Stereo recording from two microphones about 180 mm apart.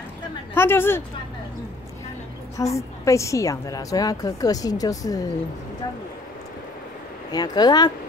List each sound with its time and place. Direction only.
0.6 s speech: 10° left (ahead or behind)
2.5 s a woman's voice: 15° left (ahead or behind)
7.2 s a woman's voice: 20° left (ahead or behind)